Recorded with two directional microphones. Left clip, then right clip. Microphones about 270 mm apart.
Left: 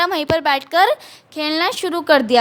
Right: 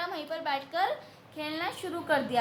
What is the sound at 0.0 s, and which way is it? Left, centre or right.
A woman's voice, left.